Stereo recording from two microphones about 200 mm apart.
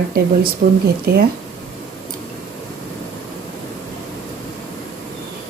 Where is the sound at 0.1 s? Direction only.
50° right (ahead or behind).